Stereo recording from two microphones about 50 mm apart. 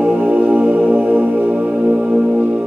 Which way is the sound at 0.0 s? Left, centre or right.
Right.